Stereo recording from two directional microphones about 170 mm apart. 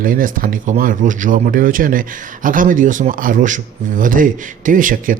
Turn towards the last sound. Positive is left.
turn(degrees=-50)  # may be behind; listen again after turning